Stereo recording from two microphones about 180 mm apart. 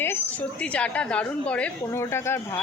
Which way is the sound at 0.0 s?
10° left (ahead or behind).